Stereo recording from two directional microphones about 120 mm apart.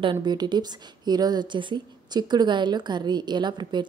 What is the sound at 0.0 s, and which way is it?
A woman's voice, 40° right (ahead or behind).